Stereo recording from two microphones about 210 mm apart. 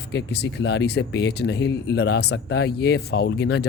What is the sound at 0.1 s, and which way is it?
Speech, 55° left (ahead or behind).